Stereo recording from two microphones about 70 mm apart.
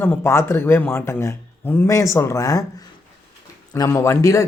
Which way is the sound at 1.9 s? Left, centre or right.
Left.